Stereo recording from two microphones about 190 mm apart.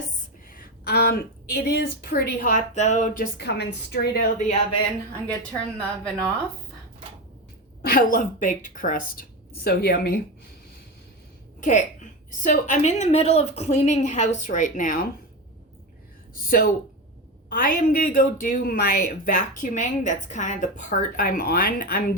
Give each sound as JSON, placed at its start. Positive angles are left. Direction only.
{"t": 0.5, "sound": "speech", "side_deg": 55}
{"t": 3.3, "sound": "a woman's voice", "side_deg": 60}
{"t": 4.4, "sound": "a woman's voice", "side_deg": 35}
{"t": 5.3, "sound": "a woman's voice", "side_deg": 5}
{"t": 7.8, "sound": "speech", "side_deg": 50}
{"t": 9.6, "sound": "a woman's voice", "side_deg": 55}
{"t": 11.6, "sound": "a woman's voice", "side_deg": 40}
{"t": 16.5, "sound": "speech", "side_deg": 50}